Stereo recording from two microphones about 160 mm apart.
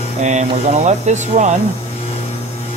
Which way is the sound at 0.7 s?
45° right (ahead or behind).